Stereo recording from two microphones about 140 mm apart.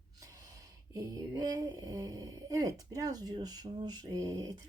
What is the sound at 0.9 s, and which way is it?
Speech, 25° right (ahead or behind).